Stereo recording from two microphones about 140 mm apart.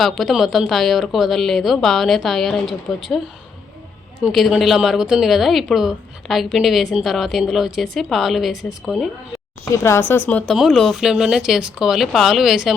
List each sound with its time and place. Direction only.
0.0 s speech: centre (ahead or behind)
4.2 s speech: centre (ahead or behind)
9.7 s speech: 20° left (ahead or behind); by 12.7 s 5° right (ahead or behind)